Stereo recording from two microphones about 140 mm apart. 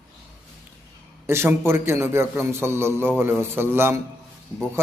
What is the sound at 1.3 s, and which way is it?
A man's voice, 20° right (ahead or behind).